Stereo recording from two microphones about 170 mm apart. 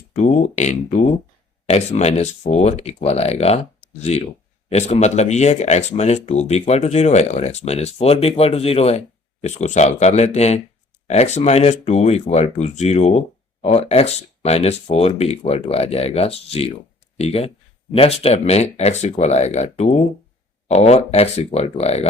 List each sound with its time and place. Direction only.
0.2 s speech: 40° left (ahead or behind)